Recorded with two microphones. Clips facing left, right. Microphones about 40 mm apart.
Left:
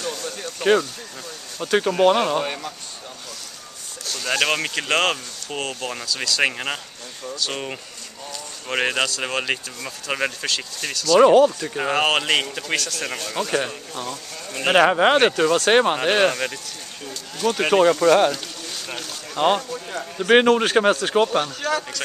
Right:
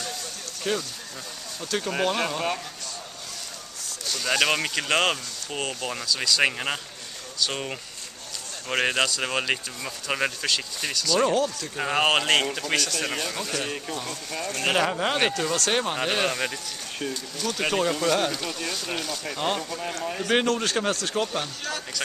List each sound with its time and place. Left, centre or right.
0.1 s a sound: left
1.6 s speech: left
4.0 s speech: centre
11.1 s speech: left
11.7 s speech: centre
13.3 s speech: centre
15.1 s speech: left
15.7 s speech: left
16.0 s speech: left
17.5 s speech: centre
18.7 s speech: centre
19.3 s speech: left